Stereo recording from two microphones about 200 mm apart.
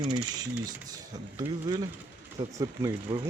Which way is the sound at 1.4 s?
20° right (ahead or behind).